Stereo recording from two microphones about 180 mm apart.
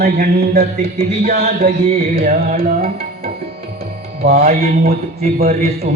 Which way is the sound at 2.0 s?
55° right (ahead or behind).